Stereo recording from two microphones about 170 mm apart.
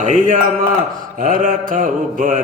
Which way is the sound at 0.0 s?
50° right (ahead or behind).